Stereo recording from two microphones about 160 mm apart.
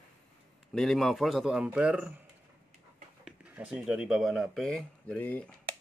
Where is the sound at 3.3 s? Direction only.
10° right (ahead or behind); by 5.5 s 10° left (ahead or behind).